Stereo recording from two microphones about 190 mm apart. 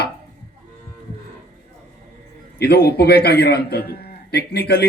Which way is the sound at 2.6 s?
60° left (ahead or behind).